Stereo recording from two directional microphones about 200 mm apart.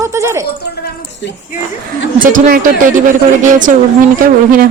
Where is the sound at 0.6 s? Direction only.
50° left (ahead or behind).